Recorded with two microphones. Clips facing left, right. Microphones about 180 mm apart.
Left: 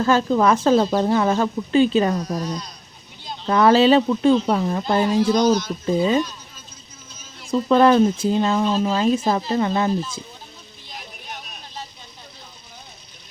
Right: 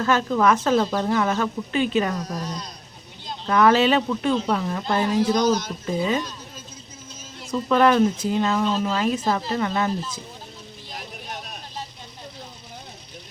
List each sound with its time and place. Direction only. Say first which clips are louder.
0.0 s speech: left 3 dB; 30° left (ahead or behind)
3.4 s speech: left 3 dB; 30° left (ahead or behind)
7.5 s speech: left 3 dB; 30° left (ahead or behind)